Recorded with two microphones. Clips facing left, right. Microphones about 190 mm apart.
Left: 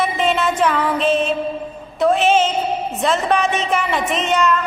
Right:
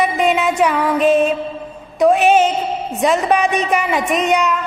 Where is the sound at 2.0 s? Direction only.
15° right (ahead or behind).